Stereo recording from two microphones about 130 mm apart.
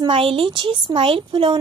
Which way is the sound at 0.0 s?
45° right (ahead or behind).